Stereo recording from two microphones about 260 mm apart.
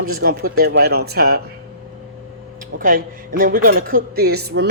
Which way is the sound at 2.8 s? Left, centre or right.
Right.